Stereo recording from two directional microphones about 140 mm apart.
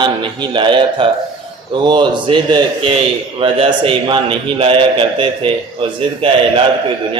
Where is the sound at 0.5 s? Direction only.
35° right (ahead or behind).